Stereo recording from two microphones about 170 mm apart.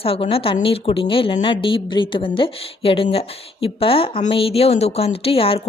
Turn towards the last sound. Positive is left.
turn(degrees=35)  # may be behind; listen again after turning